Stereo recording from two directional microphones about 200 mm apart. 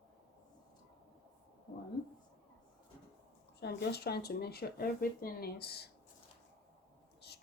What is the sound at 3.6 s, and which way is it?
Speech, 55° left (ahead or behind).